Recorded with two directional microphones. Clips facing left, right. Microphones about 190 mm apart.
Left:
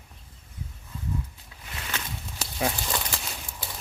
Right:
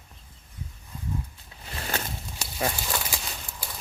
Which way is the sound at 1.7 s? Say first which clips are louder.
Right 4 dB; 40° right (ahead or behind).